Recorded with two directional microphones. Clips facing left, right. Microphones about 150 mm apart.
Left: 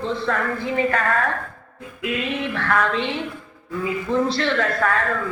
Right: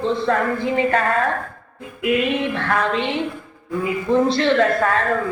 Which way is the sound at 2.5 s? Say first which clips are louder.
Even; 30° right (ahead or behind).